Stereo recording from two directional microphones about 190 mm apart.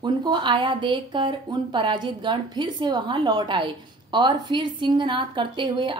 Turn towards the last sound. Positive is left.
turn(degrees=-25)  # may be behind; listen again after turning